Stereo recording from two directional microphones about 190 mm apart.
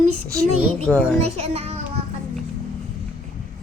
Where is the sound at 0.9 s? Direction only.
5° left (ahead or behind).